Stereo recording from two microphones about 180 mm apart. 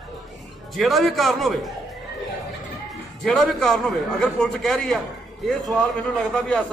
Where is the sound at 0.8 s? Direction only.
Centre (ahead or behind).